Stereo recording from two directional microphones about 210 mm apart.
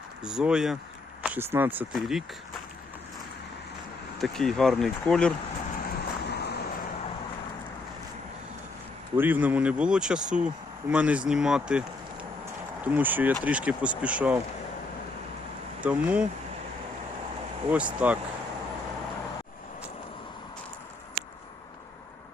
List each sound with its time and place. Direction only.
0.2 s speech: 5° right (ahead or behind)
4.2 s speech: centre (ahead or behind)
5.8 s vehicle: 50° left (ahead or behind)
9.1 s speech: 10° right (ahead or behind)
12.8 s speech: 10° right (ahead or behind)
15.8 s speech: 5° right (ahead or behind)
17.7 s speech: 5° right (ahead or behind)